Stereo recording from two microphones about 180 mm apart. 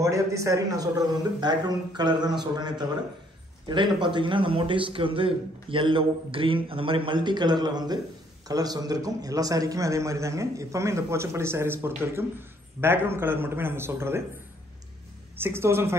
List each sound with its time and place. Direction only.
0.0 s a man's voice: 15° right (ahead or behind)
15.3 s a man's voice: 15° right (ahead or behind)